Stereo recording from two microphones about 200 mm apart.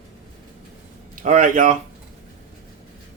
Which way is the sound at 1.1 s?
40° right (ahead or behind).